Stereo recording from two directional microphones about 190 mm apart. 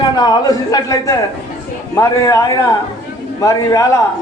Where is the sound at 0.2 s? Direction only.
20° left (ahead or behind).